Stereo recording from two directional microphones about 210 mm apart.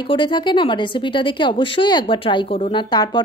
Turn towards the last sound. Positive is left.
turn(degrees=20)  # may be behind; listen again after turning